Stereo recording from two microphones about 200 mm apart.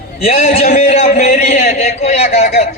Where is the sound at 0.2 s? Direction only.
30° left (ahead or behind).